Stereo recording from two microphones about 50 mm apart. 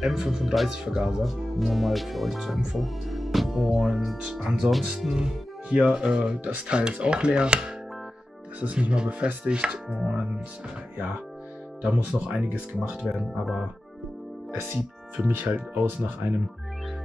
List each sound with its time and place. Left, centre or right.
0.0 s speech: centre
4.2 s speech: centre
8.9 s speech: centre
11.8 s speech: right
13.1 s speech: centre
15.2 s speech: right